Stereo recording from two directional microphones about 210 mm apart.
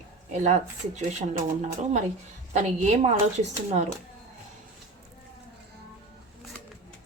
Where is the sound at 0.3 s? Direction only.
35° right (ahead or behind).